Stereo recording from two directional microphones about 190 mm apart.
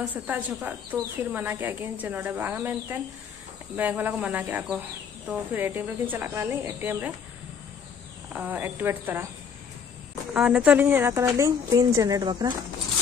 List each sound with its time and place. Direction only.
0.1 s a woman's voice: 10° right (ahead or behind)
8.3 s a woman's voice: 10° right (ahead or behind)
10.3 s a woman's voice: 5° right (ahead or behind); by 12.5 s 20° right (ahead or behind)